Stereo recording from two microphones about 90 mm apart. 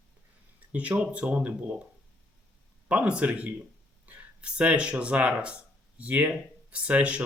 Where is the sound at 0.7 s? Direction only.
15° right (ahead or behind).